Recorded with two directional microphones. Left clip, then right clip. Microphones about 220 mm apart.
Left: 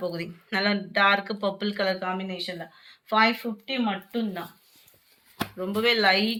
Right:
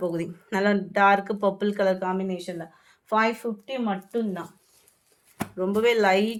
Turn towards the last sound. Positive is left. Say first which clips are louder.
# right 1 dB
turn(degrees=-55)  # may be behind; listen again after turning